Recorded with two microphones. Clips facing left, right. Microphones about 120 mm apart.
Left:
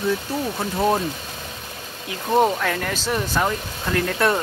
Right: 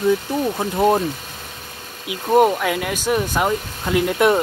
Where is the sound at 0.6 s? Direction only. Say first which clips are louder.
Right 3 dB; 15° right (ahead or behind).